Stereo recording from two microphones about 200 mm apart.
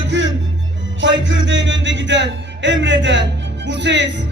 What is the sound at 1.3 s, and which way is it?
Music, 65° right (ahead or behind).